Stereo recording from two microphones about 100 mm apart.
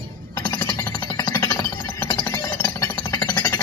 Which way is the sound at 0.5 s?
45° left (ahead or behind).